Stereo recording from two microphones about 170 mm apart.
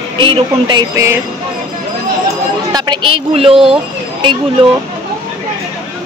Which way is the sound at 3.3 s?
35° right (ahead or behind).